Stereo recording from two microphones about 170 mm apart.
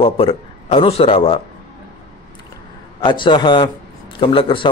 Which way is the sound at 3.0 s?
30° left (ahead or behind).